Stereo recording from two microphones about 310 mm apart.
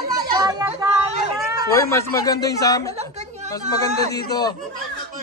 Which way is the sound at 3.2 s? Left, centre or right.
Right.